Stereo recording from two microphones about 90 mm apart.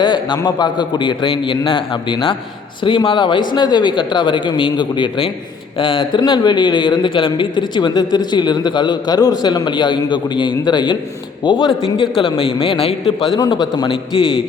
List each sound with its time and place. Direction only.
0.0 s a man's voice: 55° left (ahead or behind); by 13.1 s 90° left
13.5 s a man's voice: 60° left (ahead or behind)